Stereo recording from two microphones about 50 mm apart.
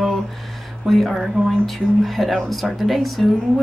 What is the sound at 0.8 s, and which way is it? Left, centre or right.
A woman's voice, centre.